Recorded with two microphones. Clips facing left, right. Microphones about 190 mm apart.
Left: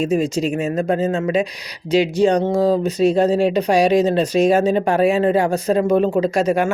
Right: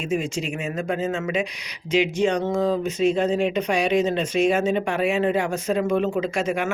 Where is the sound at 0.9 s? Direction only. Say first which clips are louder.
Left 6 dB; 35° left (ahead or behind).